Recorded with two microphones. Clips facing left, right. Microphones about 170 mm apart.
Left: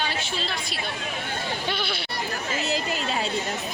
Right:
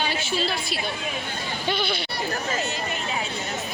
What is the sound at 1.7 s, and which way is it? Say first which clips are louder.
Speech: right 6 dB; centre (ahead or behind).